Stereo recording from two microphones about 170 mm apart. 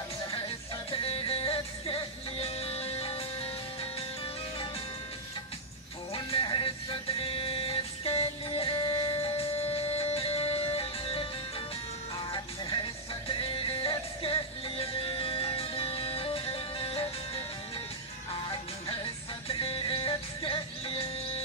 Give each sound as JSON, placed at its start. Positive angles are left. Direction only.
{"t": 0.9, "sound": "music", "side_deg": 30}
{"t": 6.1, "sound": "music", "side_deg": 30}
{"t": 13.3, "sound": "music", "side_deg": 30}
{"t": 19.4, "sound": "music", "side_deg": 35}